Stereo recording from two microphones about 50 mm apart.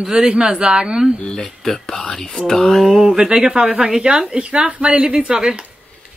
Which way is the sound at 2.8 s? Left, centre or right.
Centre.